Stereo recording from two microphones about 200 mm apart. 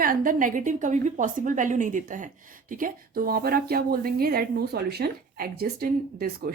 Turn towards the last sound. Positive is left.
turn(degrees=-50)  # may be behind; listen again after turning